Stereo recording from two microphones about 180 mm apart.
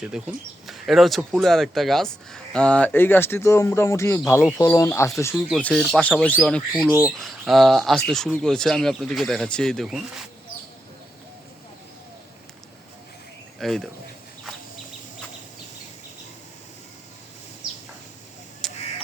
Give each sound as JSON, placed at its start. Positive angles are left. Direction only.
{"t": 0.0, "sound": "speech", "side_deg": -5}
{"t": 5.3, "sound": "speech", "side_deg": 0}
{"t": 6.7, "sound": "speech", "side_deg": -10}
{"t": 13.6, "sound": "speech", "side_deg": 0}
{"t": 18.6, "sound": "duck", "side_deg": 0}